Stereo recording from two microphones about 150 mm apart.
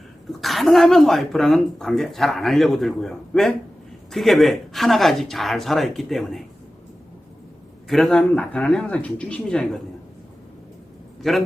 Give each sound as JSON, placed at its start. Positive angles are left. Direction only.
{"t": 0.4, "sound": "speech", "side_deg": 0}
{"t": 7.9, "sound": "speech", "side_deg": 0}
{"t": 11.2, "sound": "a man's voice", "side_deg": 0}